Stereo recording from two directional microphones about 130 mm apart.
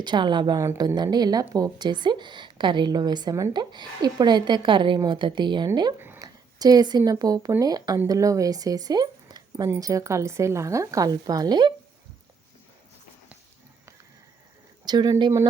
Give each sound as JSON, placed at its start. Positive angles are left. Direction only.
{"t": 0.0, "sound": "a woman's voice", "side_deg": -35}
{"t": 6.0, "sound": "a sound", "side_deg": -15}
{"t": 6.2, "sound": "a woman's voice", "side_deg": -30}
{"t": 14.8, "sound": "a woman's voice", "side_deg": -30}